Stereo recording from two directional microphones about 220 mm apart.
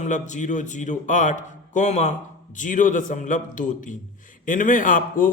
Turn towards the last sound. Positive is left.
turn(degrees=35)  # may be behind; listen again after turning